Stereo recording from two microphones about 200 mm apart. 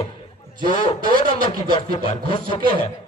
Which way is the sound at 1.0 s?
45° right (ahead or behind).